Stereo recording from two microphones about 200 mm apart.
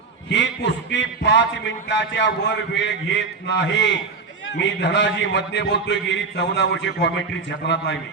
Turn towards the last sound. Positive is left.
turn(degrees=60)  # may be behind; listen again after turning